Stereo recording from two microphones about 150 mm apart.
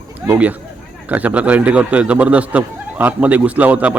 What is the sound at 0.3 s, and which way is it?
Speech, 10° right (ahead or behind).